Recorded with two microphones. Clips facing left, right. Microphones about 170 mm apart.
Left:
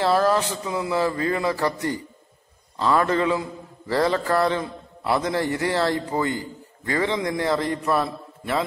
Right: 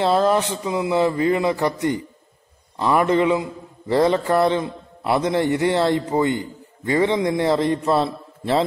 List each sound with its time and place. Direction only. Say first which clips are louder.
0.0 s a man's voice: right 2 dB; 20° right (ahead or behind)